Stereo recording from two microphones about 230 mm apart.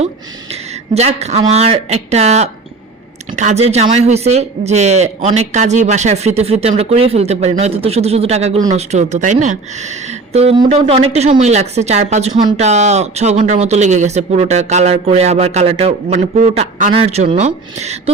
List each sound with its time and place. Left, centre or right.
0.5 s speech: right